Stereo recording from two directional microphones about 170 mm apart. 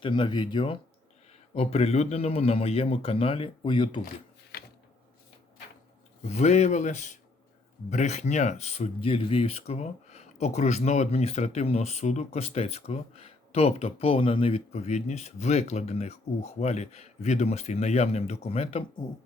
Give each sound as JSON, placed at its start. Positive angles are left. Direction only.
{"t": 0.0, "sound": "speech", "side_deg": 25}
{"t": 6.2, "sound": "speech", "side_deg": 40}